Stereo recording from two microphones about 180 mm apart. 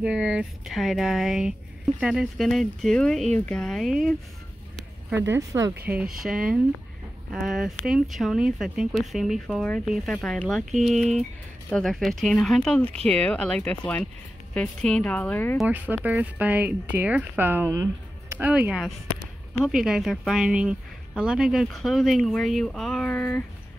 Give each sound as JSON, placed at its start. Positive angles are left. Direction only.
{"t": 0.0, "sound": "speech", "side_deg": -5}
{"t": 5.1, "sound": "speech", "side_deg": -15}
{"t": 5.9, "sound": "speech", "side_deg": -5}
{"t": 15.6, "sound": "speech", "side_deg": -10}